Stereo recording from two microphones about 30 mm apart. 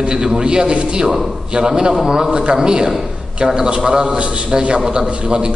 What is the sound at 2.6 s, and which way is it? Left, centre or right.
A man's voice, right.